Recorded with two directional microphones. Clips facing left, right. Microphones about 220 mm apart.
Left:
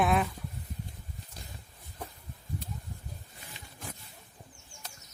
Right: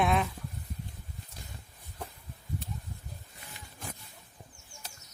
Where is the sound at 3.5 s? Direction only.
20° left (ahead or behind).